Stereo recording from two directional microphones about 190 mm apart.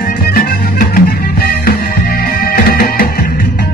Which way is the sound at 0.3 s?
50° left (ahead or behind).